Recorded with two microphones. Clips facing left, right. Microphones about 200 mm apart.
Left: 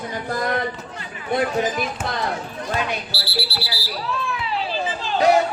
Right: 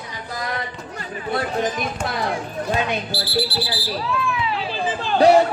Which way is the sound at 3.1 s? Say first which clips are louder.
Right 5 dB; 50° right (ahead or behind).